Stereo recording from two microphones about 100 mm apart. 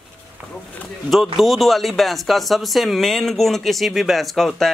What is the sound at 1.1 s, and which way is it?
A man's voice, centre (ahead or behind).